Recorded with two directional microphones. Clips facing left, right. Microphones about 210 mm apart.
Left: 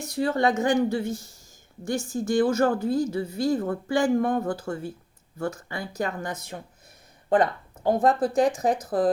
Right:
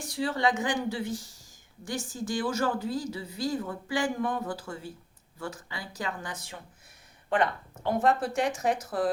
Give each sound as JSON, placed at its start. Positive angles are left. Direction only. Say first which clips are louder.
{"t": 0.2, "sound": "a woman's voice", "louder": "left 5 dB", "side_deg": 45}
{"t": 7.9, "sound": "speech", "louder": "left 4 dB", "side_deg": 35}